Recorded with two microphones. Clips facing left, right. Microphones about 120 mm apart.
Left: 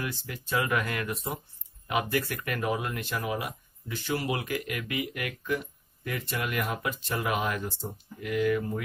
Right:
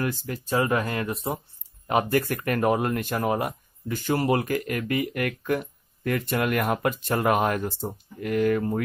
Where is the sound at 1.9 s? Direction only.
45° right (ahead or behind).